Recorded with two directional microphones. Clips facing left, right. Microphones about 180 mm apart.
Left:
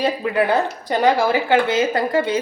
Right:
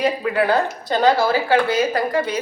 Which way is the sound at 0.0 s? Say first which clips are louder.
Even; 20° left (ahead or behind).